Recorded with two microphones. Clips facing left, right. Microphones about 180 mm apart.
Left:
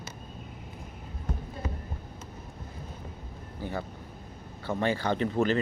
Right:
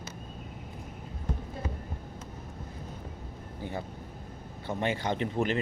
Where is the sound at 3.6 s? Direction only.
20° right (ahead or behind).